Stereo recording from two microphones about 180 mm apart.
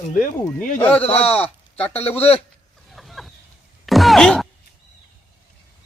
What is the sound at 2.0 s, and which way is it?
Speech, 35° left (ahead or behind).